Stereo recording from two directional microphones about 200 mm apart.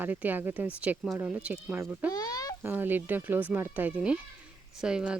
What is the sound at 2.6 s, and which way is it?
Speech, 10° right (ahead or behind).